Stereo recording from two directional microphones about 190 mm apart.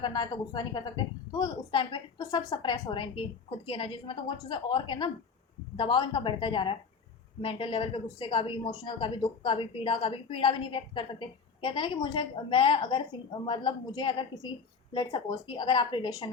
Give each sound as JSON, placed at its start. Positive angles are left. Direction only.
{"t": 0.0, "sound": "a woman's voice", "side_deg": 20}